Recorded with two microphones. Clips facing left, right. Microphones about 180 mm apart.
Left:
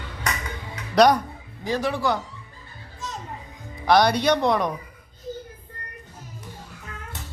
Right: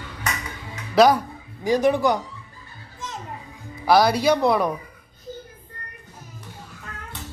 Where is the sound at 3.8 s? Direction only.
5° right (ahead or behind).